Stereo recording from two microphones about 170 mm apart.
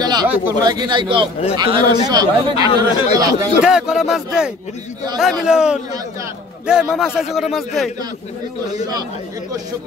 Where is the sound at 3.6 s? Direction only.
5° right (ahead or behind).